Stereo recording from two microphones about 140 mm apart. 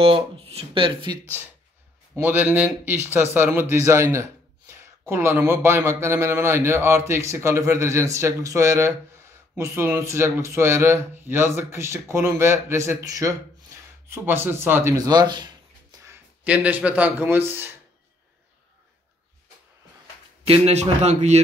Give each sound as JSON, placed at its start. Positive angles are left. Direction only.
{"t": 0.0, "sound": "speech", "side_deg": -45}
{"t": 1.2, "sound": "a man's voice", "side_deg": -15}
{"t": 15.0, "sound": "a sound", "side_deg": -30}
{"t": 16.4, "sound": "a man's voice", "side_deg": -10}
{"t": 20.4, "sound": "a man's voice", "side_deg": -50}